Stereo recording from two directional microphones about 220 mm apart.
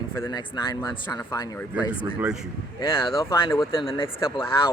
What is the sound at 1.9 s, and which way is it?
Speech, 5° right (ahead or behind).